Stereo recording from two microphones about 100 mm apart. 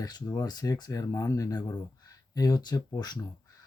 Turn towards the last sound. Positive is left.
turn(degrees=40)  # may be behind; listen again after turning